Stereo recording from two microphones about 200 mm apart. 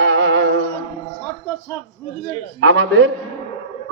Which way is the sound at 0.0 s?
70° right (ahead or behind).